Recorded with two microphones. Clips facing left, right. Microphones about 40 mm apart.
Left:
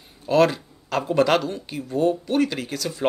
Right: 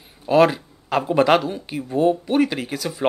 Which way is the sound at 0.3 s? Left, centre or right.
Centre.